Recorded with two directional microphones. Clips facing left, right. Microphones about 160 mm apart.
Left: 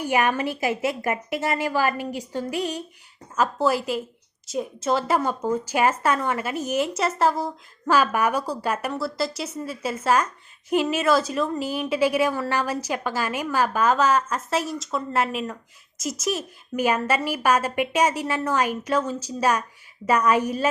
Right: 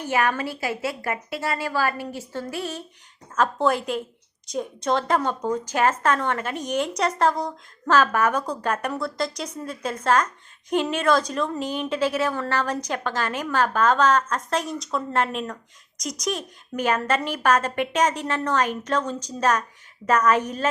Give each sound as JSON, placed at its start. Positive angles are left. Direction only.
{"t": 0.0, "sound": "a woman's voice", "side_deg": 15}